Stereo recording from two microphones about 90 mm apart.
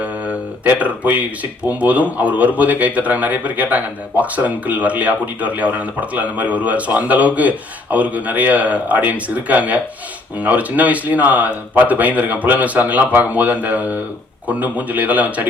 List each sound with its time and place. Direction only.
0.0 s speech: 15° right (ahead or behind)